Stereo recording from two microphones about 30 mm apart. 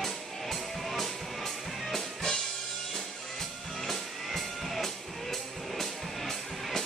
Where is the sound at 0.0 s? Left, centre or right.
Centre.